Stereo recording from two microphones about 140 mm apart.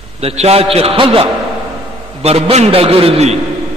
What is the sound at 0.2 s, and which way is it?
A man's voice, 45° right (ahead or behind).